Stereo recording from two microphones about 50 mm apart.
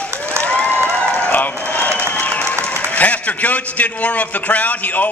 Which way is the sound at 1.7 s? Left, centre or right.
Left.